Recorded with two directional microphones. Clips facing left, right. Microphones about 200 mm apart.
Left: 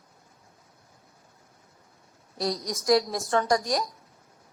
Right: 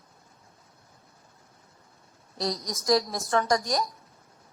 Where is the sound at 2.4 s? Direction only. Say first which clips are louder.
Left 2 dB; 10° left (ahead or behind).